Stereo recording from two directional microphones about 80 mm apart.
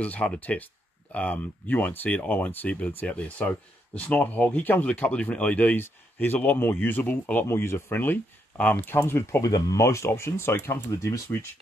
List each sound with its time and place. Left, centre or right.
0.0 s speech: centre; by 9.4 s left
9.4 s speech: left